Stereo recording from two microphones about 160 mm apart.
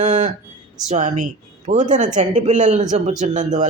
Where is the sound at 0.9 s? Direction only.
50° right (ahead or behind).